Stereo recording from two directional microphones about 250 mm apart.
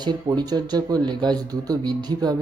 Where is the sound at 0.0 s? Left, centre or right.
Centre.